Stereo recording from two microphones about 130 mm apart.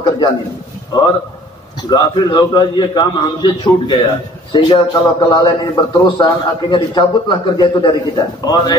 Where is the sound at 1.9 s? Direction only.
35° left (ahead or behind).